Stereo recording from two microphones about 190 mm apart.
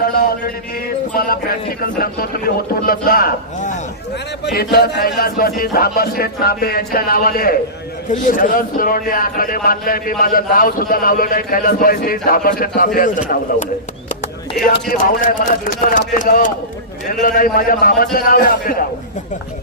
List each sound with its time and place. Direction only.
0.0 s music: 55° left (ahead or behind)
1.1 s a man's voice: 50° left (ahead or behind)
4.4 s a man's voice: 60° left (ahead or behind)
14.7 s a man's voice: 50° left (ahead or behind)